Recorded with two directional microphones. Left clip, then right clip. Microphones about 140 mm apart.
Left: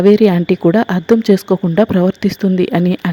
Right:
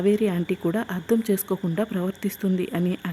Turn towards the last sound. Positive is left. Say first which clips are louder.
# left 12 dB
turn(degrees=40)  # may be behind; listen again after turning